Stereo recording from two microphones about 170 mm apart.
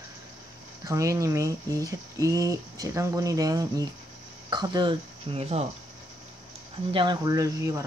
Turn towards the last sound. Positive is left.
turn(degrees=-20)  # may be behind; listen again after turning